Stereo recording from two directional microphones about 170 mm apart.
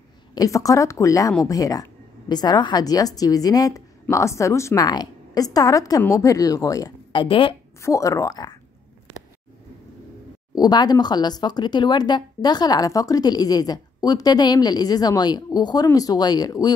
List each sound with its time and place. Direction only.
0.3 s speech: 20° left (ahead or behind)
7.8 s speech: 20° left (ahead or behind)
10.5 s speech: 25° left (ahead or behind)